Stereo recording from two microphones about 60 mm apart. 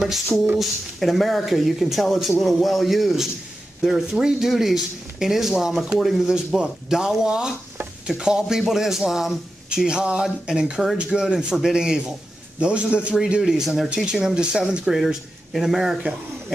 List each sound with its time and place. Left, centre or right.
0.6 s a man's voice: centre
13.4 s speech: centre